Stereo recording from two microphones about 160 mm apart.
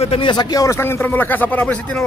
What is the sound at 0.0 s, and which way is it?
Speech, 35° left (ahead or behind).